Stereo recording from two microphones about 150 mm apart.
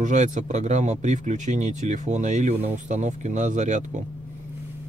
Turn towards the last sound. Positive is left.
turn(degrees=-55)  # may be behind; listen again after turning